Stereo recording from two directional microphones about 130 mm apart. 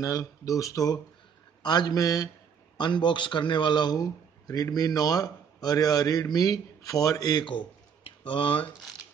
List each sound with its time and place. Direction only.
0.0 s a man's voice: 25° left (ahead or behind)
1.6 s mantra: 35° left (ahead or behind)
2.8 s a man's voice: 35° left (ahead or behind)